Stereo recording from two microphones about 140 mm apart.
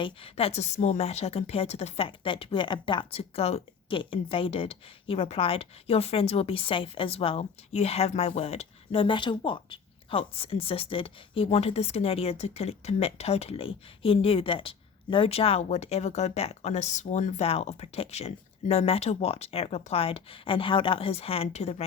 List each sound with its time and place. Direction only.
0.0 s a woman's voice: 45° left (ahead or behind)